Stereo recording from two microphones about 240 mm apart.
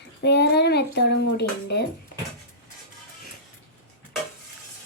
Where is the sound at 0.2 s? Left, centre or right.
Left.